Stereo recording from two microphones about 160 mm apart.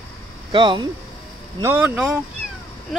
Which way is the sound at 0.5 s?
30° right (ahead or behind).